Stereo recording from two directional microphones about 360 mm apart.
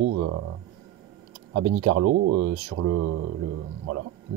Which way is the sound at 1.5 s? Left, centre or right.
Right.